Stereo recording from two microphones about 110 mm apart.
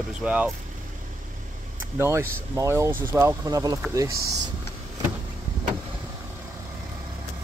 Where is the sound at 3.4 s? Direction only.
35° right (ahead or behind).